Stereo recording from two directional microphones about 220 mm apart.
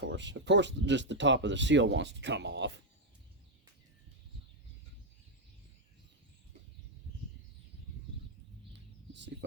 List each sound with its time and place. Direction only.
0.0 s speech: 55° right (ahead or behind)